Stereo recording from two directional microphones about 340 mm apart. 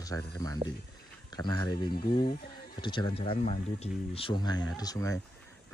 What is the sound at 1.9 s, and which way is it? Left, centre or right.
Speech, left.